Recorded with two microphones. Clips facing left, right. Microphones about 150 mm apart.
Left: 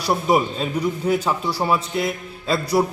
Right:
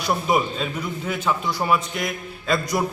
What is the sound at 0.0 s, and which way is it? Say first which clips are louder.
A man's voice: left 2 dB; 35° left (ahead or behind).